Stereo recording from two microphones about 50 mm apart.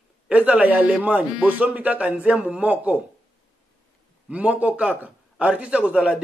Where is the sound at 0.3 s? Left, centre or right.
Right.